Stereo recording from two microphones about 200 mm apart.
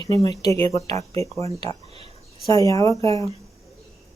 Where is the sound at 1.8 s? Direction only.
30° right (ahead or behind).